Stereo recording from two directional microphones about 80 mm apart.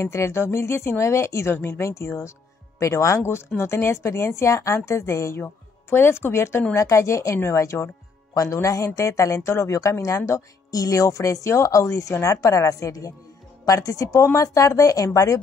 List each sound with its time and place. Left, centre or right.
0.0 s speech: left
5.4 s a woman's voice: left